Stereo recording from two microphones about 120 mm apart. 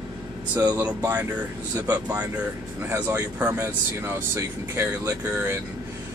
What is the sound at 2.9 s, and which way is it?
Speech, 20° right (ahead or behind).